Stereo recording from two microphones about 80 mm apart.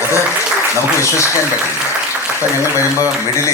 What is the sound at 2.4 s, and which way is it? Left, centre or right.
A man's voice, left.